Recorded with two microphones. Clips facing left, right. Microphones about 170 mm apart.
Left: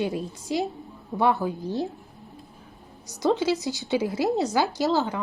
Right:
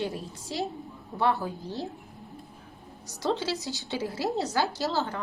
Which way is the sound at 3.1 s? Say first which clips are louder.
Left 6 dB; 15° left (ahead or behind).